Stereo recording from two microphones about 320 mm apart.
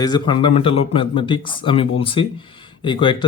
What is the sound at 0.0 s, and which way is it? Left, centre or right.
Speech, centre.